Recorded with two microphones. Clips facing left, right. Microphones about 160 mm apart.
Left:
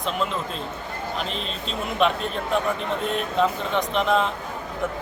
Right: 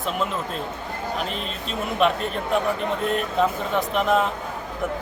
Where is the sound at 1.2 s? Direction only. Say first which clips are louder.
Right 1 dB; 5° right (ahead or behind).